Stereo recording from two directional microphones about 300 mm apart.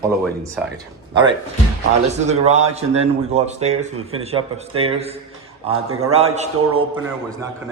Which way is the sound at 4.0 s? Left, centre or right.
Right.